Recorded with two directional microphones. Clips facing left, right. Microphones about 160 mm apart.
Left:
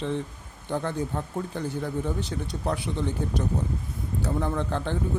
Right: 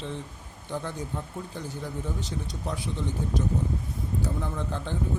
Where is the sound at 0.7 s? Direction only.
60° left (ahead or behind).